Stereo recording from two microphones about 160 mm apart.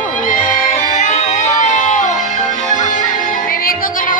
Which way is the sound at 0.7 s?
50° left (ahead or behind).